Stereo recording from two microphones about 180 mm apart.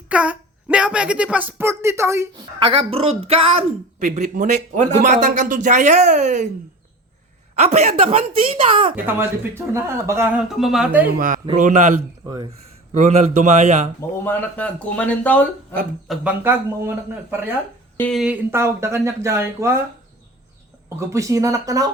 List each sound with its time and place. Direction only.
0.1 s speech: 5° right (ahead or behind)
2.6 s a woman's voice: 30° right (ahead or behind)
7.5 s a woman's voice: 35° right (ahead or behind)
9.0 s speech: 15° right (ahead or behind)
10.5 s speech: centre (ahead or behind)
11.0 s a man's voice: 50° right (ahead or behind)
12.2 s speech: 20° right (ahead or behind)
12.9 s a woman's voice: 40° right (ahead or behind)
14.3 s speech: 10° left (ahead or behind)
16.0 s speech: 10° right (ahead or behind)
17.9 s speech: 10° left (ahead or behind)
18.2 s speech: 10° right (ahead or behind)
21.0 s speech: 15° right (ahead or behind)